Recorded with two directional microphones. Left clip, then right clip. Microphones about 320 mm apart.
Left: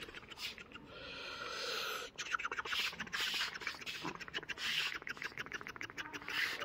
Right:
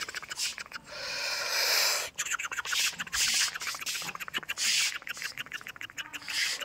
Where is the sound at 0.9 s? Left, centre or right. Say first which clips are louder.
Right 12 dB; right.